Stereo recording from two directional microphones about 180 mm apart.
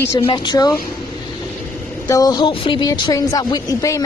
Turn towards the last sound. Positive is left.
turn(degrees=20)  # may be behind; listen again after turning